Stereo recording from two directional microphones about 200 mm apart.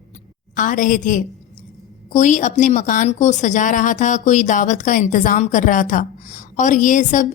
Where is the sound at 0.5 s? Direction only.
40° left (ahead or behind).